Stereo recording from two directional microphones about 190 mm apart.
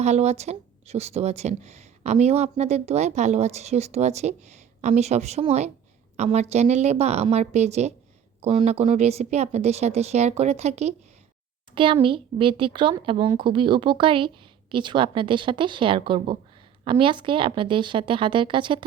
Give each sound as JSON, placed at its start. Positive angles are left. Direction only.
{"t": 0.0, "sound": "a child's voice", "side_deg": -35}